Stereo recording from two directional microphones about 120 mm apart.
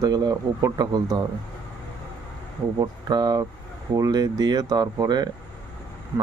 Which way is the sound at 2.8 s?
35° right (ahead or behind).